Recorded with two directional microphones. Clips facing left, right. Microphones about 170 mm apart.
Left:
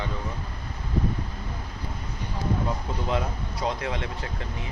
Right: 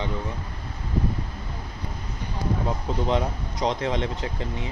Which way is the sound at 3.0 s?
20° right (ahead or behind).